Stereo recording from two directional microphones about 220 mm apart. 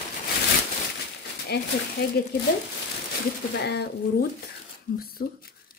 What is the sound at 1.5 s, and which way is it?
Speech, 45° left (ahead or behind).